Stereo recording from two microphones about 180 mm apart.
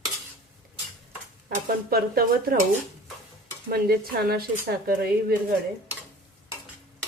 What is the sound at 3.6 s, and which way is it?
Speech, 55° right (ahead or behind).